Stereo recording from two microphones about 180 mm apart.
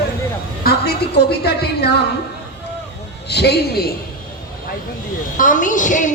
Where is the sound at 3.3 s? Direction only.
65° left (ahead or behind).